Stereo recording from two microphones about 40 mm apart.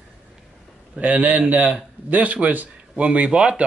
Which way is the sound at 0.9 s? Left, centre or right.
Right.